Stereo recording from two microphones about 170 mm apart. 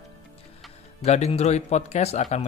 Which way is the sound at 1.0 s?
40° left (ahead or behind).